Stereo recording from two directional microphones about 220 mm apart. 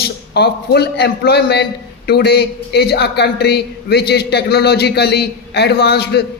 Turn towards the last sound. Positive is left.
turn(degrees=50)  # may be behind; listen again after turning